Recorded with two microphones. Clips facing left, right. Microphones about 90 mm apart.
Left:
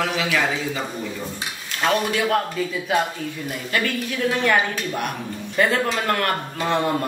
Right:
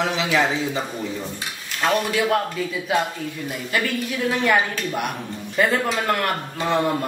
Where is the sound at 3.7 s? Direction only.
5° right (ahead or behind).